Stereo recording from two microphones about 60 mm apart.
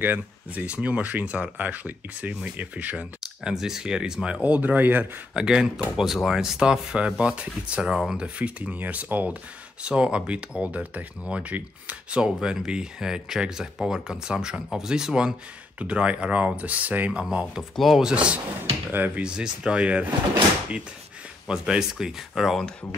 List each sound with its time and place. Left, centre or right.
0.0 s speech: right
0.7 s speech: right
3.4 s speech: centre; by 5.0 s right
5.3 s speech: centre
15.8 s speech: right
17.2 s speech: centre
18.1 s speech: centre
18.9 s speech: right
19.2 s speech: centre
21.5 s speech: centre